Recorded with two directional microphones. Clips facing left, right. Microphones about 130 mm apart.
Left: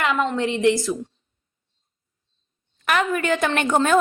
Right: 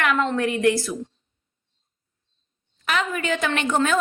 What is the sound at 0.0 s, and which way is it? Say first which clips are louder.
Speech: even; 20° left (ahead or behind).